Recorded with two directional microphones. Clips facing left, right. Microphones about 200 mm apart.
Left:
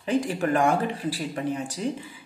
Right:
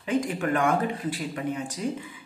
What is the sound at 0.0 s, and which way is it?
Speech, 35° left (ahead or behind).